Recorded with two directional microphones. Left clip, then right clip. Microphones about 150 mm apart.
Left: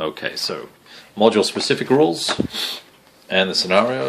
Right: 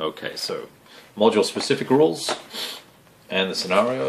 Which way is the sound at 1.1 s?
45° left (ahead or behind).